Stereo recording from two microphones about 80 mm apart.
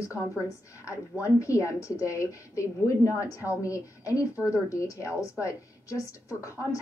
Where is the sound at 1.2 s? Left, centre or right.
Left.